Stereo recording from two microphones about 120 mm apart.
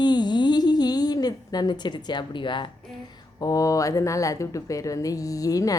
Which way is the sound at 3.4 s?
30° left (ahead or behind).